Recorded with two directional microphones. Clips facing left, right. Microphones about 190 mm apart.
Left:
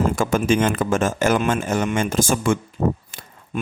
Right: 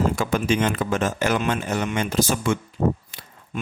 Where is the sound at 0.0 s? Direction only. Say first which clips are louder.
Left 2 dB; 50° left (ahead or behind).